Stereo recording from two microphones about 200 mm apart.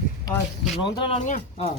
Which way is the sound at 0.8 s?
25° left (ahead or behind).